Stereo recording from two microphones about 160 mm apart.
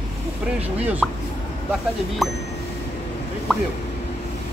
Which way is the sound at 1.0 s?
5° left (ahead or behind).